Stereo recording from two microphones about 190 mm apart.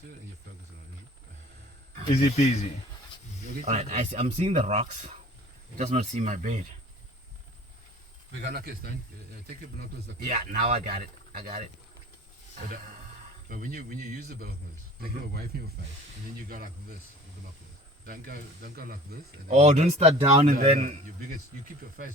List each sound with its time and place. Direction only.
2.3 s speech: 35° left (ahead or behind)
3.5 s speech: 40° right (ahead or behind)
8.4 s speech: 55° right (ahead or behind)
13.5 s speech: 45° right (ahead or behind)
18.0 s speech: 50° right (ahead or behind)